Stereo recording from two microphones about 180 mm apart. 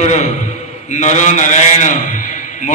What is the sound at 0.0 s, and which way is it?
A man's voice, 40° left (ahead or behind).